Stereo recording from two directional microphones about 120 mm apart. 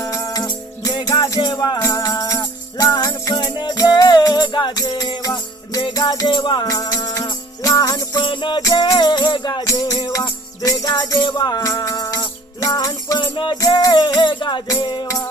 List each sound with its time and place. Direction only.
0.0 s music: 30° left (ahead or behind)
8.6 s music: 30° left (ahead or behind)